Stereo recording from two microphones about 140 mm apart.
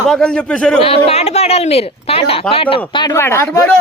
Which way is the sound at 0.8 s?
45° left (ahead or behind).